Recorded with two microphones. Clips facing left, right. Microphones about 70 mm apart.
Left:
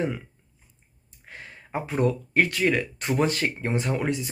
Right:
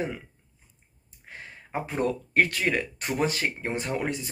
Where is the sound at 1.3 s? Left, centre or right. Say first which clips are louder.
Left 1 dB; right.